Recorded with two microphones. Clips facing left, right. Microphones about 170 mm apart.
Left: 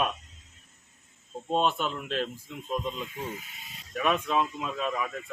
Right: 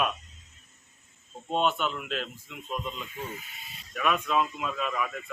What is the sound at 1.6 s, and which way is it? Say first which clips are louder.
Speech: right 1 dB; 35° left (ahead or behind).